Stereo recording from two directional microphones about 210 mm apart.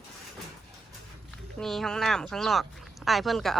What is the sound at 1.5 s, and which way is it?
Speech, centre (ahead or behind).